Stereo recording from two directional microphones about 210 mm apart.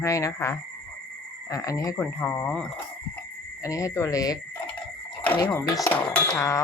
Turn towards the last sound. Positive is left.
turn(degrees=15)  # may be behind; listen again after turning